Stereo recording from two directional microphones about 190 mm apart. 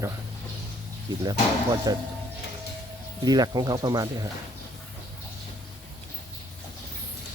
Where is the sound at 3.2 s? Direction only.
20° right (ahead or behind).